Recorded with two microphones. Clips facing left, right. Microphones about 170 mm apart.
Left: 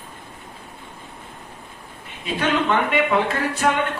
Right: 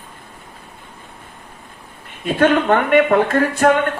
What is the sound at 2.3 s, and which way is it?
Speech, 55° right (ahead or behind).